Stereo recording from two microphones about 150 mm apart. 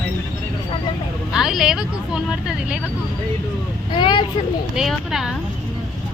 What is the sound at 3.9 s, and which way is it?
Speech, 30° left (ahead or behind).